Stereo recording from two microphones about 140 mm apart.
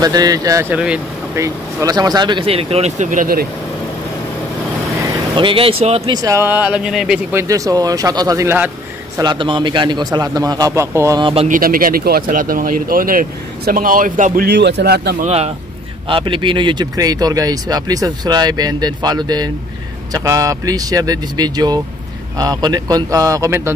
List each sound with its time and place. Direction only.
0.0 s speech: 25° right (ahead or behind)
0.7 s speech: 5° right (ahead or behind)
1.3 s speech: 20° right (ahead or behind); by 3.4 s 80° right
5.3 s speech: 40° right (ahead or behind)
6.1 s speech: 25° right (ahead or behind); by 7.2 s 5° right (ahead or behind)
7.3 s speech: 25° right (ahead or behind)
9.2 s speech: 35° right (ahead or behind)
11.4 s speech: 80° right
15.1 s speech: 50° right (ahead or behind)
16.1 s speech: 35° right (ahead or behind); by 23.7 s 20° right (ahead or behind)